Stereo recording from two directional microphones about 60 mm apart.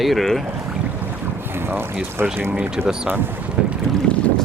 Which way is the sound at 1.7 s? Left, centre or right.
Right.